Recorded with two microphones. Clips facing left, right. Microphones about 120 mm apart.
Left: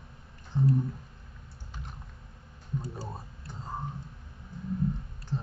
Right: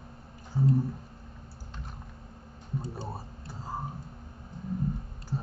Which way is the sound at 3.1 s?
5° right (ahead or behind).